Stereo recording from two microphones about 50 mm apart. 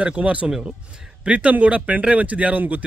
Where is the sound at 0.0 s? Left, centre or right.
Right.